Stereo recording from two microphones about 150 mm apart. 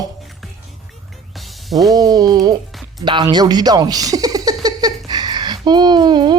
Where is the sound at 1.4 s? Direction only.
Centre (ahead or behind).